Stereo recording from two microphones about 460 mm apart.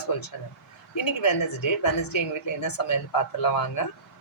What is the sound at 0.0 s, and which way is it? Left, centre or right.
A woman's voice, left.